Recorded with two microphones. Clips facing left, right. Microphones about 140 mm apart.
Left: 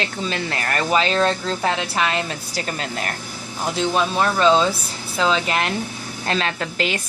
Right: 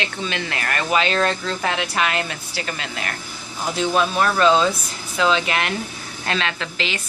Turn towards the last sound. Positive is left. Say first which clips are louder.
# left 3 dB
turn(degrees=45)  # may be behind; listen again after turning